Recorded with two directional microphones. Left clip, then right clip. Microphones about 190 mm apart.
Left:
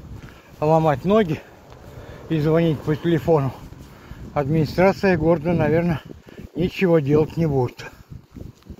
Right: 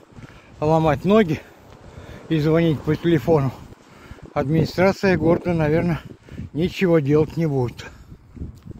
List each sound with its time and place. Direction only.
0.6 s speech: 30° right (ahead or behind)
0.8 s speech: 50° right (ahead or behind); by 7.9 s 30° right (ahead or behind)